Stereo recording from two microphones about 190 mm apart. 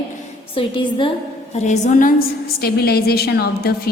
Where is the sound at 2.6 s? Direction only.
55° left (ahead or behind).